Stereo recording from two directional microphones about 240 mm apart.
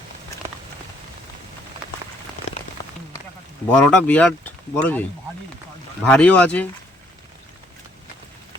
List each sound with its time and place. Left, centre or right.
2.5 s rain on surface: left
3.7 s speech: centre
6.1 s speech: centre